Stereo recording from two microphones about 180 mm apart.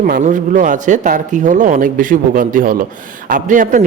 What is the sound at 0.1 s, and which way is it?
A man's voice, 45° right (ahead or behind).